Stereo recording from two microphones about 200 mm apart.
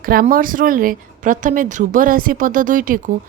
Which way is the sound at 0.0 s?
45° right (ahead or behind).